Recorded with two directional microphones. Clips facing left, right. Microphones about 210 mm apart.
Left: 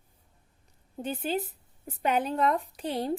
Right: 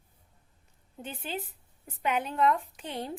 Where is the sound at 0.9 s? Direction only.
40° left (ahead or behind).